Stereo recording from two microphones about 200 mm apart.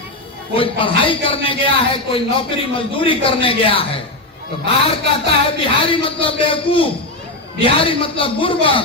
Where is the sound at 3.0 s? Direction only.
25° left (ahead or behind).